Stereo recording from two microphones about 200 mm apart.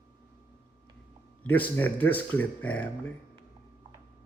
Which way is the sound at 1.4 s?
10° left (ahead or behind).